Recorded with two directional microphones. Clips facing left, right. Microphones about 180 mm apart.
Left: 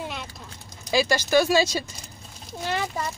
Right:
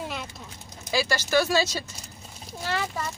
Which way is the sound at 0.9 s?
15° left (ahead or behind).